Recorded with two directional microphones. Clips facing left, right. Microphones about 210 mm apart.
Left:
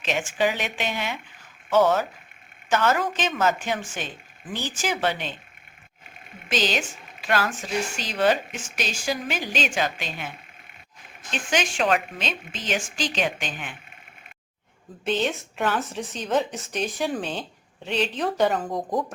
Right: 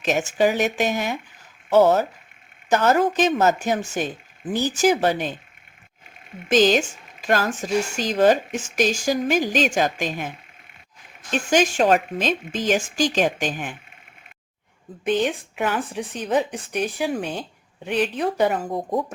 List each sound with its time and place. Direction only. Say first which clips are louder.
0.0 s a woman's voice: right 5 dB; 45° right (ahead or behind)
6.5 s speech: right 9 dB; 45° right (ahead or behind)
11.3 s speech: right 6 dB; 40° right (ahead or behind)
15.0 s speech: right 3 dB; 10° right (ahead or behind)
18.9 s speech: right 3 dB; centre (ahead or behind)